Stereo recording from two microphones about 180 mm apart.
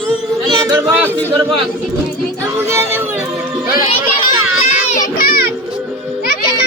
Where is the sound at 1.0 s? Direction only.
10° left (ahead or behind).